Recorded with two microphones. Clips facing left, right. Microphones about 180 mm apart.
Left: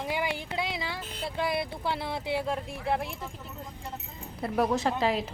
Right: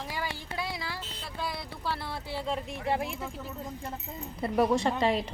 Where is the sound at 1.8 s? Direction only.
20° left (ahead or behind).